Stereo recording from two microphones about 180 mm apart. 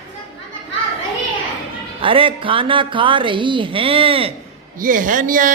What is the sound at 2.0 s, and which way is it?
A woman's voice, 30° right (ahead or behind).